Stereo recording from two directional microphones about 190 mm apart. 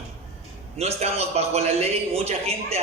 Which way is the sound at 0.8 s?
35° right (ahead or behind).